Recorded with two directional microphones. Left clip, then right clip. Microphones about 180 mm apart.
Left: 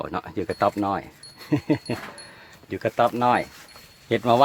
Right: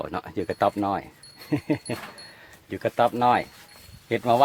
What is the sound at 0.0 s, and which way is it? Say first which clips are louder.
Speech: left 1 dB; 10° right (ahead or behind).